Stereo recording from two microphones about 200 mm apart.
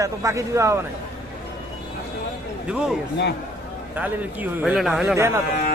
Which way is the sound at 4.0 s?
5° right (ahead or behind).